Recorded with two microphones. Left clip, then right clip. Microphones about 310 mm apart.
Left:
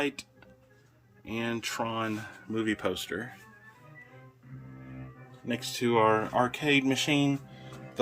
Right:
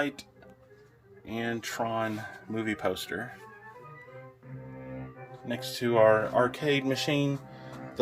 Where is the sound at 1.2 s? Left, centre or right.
Centre.